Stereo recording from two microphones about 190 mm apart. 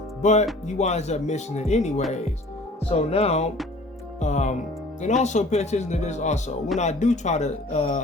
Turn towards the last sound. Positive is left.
turn(degrees=40)  # may be behind; listen again after turning